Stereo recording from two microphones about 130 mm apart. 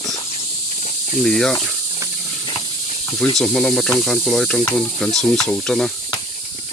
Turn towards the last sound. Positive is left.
turn(degrees=5)  # may be behind; listen again after turning